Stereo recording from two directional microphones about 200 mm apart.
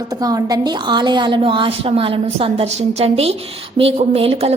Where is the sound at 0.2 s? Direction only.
20° right (ahead or behind).